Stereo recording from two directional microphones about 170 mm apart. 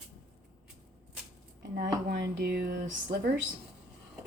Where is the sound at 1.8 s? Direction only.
70° right (ahead or behind).